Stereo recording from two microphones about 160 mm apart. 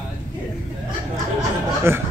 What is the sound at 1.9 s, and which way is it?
Speech, 15° right (ahead or behind).